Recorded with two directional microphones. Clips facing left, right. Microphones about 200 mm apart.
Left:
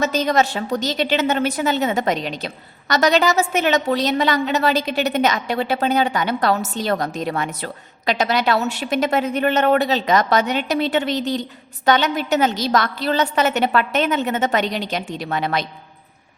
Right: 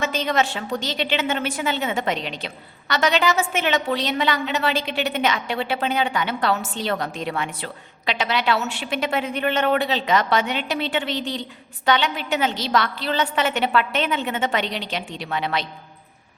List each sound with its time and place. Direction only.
0.0 s a woman's voice: 40° left (ahead or behind)